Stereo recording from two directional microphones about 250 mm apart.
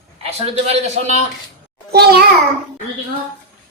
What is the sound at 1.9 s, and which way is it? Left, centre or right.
Speech, right.